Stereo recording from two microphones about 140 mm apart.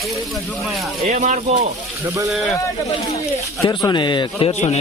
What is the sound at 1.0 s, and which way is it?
Speech, 55° right (ahead or behind).